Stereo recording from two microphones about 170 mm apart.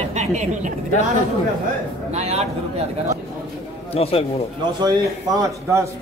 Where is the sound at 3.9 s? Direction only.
35° left (ahead or behind).